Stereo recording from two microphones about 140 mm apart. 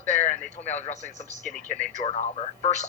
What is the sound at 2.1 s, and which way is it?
Speech, 45° left (ahead or behind).